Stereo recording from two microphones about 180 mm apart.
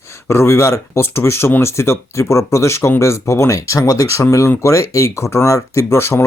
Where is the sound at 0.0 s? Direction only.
15° left (ahead or behind).